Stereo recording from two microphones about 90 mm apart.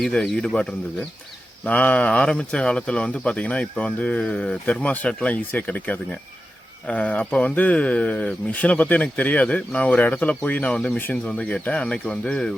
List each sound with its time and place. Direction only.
0.0 s speech: 10° left (ahead or behind)